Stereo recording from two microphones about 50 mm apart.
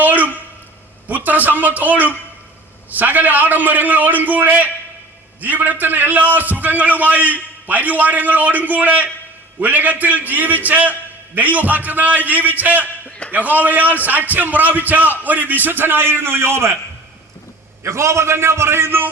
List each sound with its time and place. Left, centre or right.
0.0 s a sound: right
1.0 s a man's voice: right
17.8 s a man's voice: right